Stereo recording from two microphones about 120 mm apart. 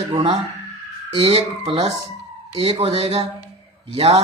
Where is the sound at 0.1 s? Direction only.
40° right (ahead or behind).